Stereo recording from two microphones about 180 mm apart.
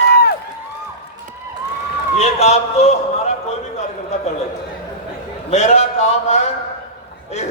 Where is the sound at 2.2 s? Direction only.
35° left (ahead or behind).